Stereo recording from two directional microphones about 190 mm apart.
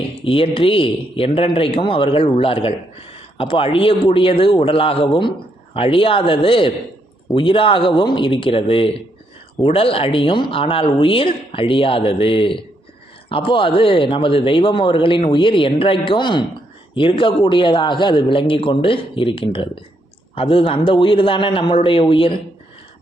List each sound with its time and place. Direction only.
0.3 s speech: 30° left (ahead or behind)